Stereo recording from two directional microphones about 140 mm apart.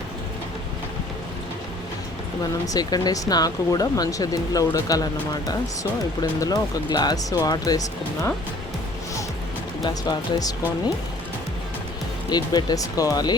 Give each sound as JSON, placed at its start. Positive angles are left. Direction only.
{"t": 2.6, "sound": "speech", "side_deg": 25}
{"t": 9.8, "sound": "speech", "side_deg": 25}
{"t": 12.3, "sound": "speech", "side_deg": 30}